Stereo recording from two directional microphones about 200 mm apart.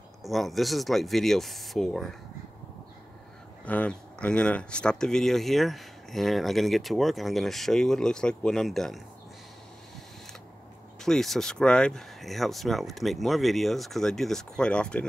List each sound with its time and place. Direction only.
0.2 s speech: centre (ahead or behind)
3.6 s speech: 5° left (ahead or behind)
11.0 s speech: centre (ahead or behind)